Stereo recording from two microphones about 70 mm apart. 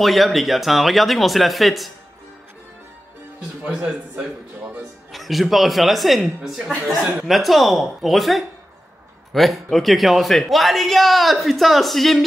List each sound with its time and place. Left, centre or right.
0.0 s a man's voice: centre
3.6 s a man's voice: centre
5.1 s a man's voice: centre